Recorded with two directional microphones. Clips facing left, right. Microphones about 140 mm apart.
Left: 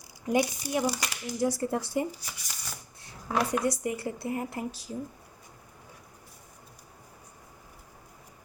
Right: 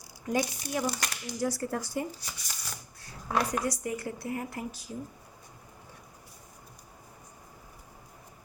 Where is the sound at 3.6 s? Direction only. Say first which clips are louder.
Left 3 dB; 25° left (ahead or behind).